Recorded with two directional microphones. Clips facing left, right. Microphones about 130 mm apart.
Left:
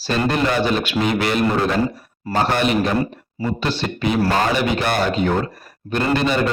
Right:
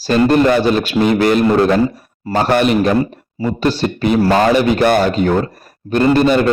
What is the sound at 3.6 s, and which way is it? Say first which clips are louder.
A man's voice: right 8 dB; 40° right (ahead or behind).